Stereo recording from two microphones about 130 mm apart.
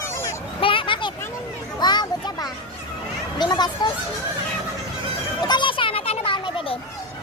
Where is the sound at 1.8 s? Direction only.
35° left (ahead or behind).